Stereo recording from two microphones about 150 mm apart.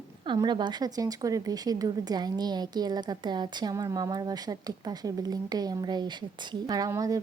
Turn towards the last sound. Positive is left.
turn(degrees=-20)  # may be behind; listen again after turning